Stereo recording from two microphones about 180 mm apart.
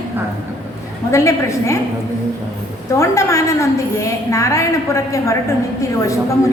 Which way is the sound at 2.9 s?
15° left (ahead or behind).